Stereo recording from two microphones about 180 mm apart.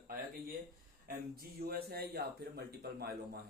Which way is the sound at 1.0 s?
55° right (ahead or behind).